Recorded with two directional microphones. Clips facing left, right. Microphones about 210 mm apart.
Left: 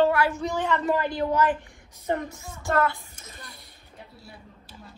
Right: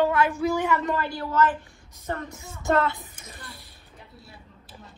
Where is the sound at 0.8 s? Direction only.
15° left (ahead or behind).